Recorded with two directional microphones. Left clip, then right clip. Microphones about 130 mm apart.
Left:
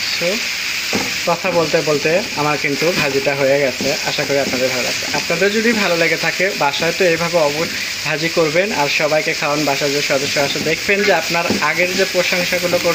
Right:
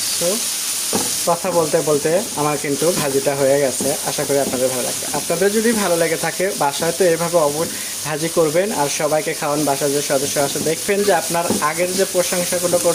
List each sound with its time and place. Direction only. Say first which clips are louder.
1.3 s speech: left 1 dB; 20° right (ahead or behind)
5.3 s speech: left 1 dB; 25° right (ahead or behind)